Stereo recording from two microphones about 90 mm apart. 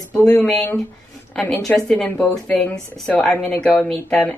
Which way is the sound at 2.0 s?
15° left (ahead or behind).